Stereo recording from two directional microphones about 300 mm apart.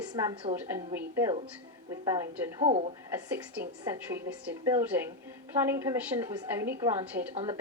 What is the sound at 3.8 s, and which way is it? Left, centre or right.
A woman's voice, centre.